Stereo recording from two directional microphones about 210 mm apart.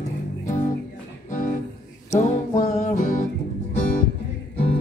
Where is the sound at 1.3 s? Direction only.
40° left (ahead or behind).